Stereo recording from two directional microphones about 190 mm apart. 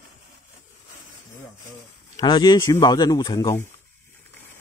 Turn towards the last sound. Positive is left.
turn(degrees=15)  # may be behind; listen again after turning